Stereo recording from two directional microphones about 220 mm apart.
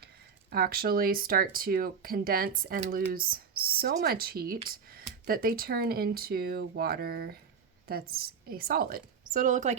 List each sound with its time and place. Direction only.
0.5 s a woman's voice: 45° right (ahead or behind)